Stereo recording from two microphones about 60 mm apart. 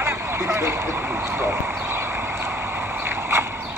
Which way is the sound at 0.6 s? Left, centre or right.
Right.